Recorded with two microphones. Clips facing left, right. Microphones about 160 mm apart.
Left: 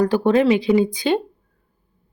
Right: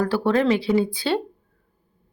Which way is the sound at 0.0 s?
15° left (ahead or behind).